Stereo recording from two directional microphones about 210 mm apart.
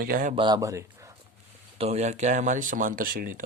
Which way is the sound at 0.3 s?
20° right (ahead or behind).